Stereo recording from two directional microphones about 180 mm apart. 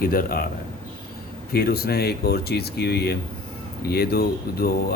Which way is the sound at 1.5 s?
60° left (ahead or behind).